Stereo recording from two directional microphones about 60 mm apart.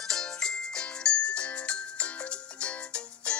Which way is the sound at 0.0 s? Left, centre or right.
Centre.